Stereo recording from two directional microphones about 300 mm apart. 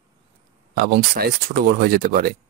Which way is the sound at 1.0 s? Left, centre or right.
Right.